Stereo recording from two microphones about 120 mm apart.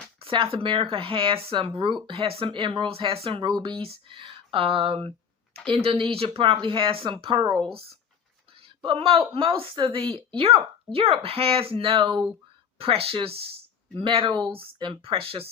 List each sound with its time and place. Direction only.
0.2 s speech: 50° right (ahead or behind)